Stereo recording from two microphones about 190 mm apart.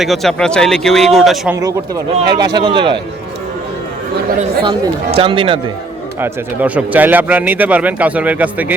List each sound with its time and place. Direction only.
0.0 s speech: centre (ahead or behind)
2.2 s speech: 20° right (ahead or behind)
4.6 s speech: 25° right (ahead or behind)
6.1 s speech: 10° right (ahead or behind)